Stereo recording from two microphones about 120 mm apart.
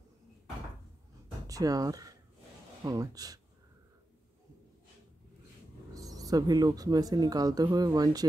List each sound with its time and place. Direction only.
1.5 s speech: 30° right (ahead or behind)
5.9 s speech: 30° right (ahead or behind)